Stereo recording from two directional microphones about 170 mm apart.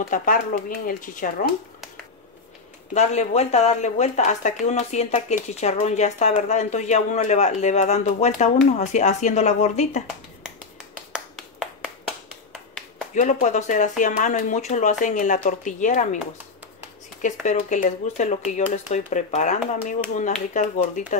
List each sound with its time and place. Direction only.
0.1 s speech: 50° left (ahead or behind)
2.9 s speech: 40° left (ahead or behind)
11.1 s finger snapping: centre (ahead or behind)
13.1 s speech: 45° left (ahead or behind)
17.2 s speech: 45° left (ahead or behind)